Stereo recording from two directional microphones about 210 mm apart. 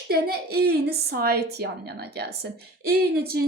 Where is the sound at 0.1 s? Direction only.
50° right (ahead or behind).